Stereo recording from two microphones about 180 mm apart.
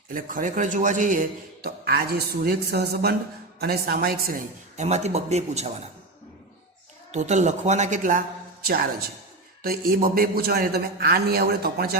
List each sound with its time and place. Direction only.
0.1 s a man's voice: 50° right (ahead or behind)
4.8 s speech: 40° right (ahead or behind)
7.1 s speech: 40° right (ahead or behind)
8.6 s a man's voice: 60° right (ahead or behind)